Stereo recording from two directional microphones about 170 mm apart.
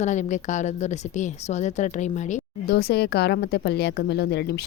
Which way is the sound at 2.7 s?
70° left (ahead or behind).